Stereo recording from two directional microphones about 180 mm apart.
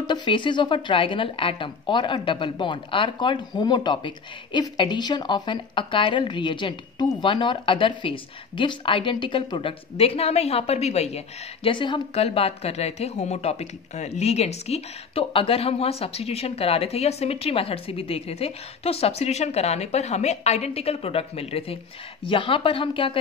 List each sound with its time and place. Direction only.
0.0 s a woman's voice: 25° left (ahead or behind)